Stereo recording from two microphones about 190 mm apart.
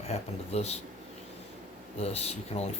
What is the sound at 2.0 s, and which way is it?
Speech, 35° left (ahead or behind).